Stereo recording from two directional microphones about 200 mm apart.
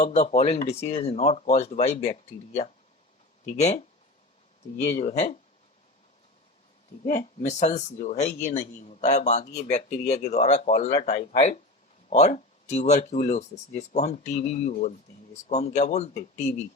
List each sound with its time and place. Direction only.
0.0 s speech: 35° left (ahead or behind)
3.6 s speech: 35° left (ahead or behind)
7.0 s speech: 35° left (ahead or behind)